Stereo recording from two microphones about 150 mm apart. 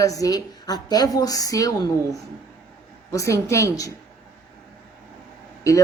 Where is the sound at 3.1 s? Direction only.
20° left (ahead or behind).